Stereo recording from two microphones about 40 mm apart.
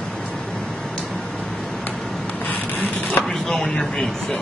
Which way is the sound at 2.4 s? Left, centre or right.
Left.